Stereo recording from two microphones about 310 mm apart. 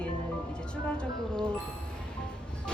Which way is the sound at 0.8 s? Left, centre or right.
Centre.